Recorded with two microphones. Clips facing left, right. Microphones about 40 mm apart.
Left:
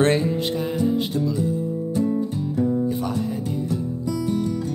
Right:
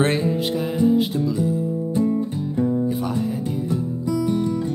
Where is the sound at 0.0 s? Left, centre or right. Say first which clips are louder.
Left 1 dB; centre.